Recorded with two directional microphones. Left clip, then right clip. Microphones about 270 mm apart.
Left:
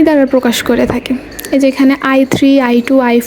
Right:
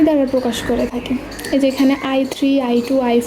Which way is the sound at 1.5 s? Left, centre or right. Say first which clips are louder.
Left 5 dB; centre.